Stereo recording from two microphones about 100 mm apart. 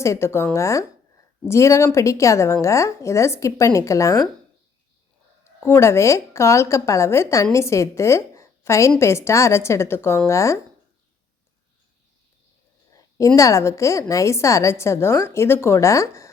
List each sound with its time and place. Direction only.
0.0 s a woman's voice: 30° left (ahead or behind)
5.6 s a woman's voice: 25° left (ahead or behind)
12.9 s a woman's voice: 35° left (ahead or behind)